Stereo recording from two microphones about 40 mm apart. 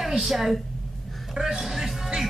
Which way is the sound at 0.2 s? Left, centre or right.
Centre.